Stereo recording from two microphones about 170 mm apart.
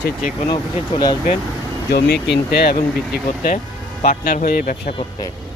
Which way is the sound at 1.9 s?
70° left (ahead or behind).